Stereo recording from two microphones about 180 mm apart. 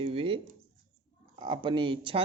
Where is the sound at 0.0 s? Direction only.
30° right (ahead or behind).